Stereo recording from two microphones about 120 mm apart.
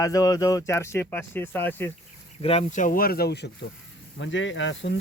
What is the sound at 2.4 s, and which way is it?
Speech, 75° left (ahead or behind).